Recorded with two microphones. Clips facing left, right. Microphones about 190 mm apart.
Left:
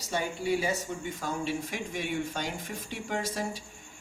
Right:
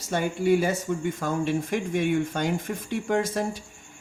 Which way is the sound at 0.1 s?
55° right (ahead or behind).